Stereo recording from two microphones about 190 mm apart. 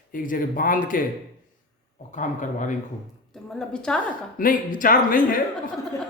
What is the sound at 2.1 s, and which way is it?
Speech, 40° left (ahead or behind).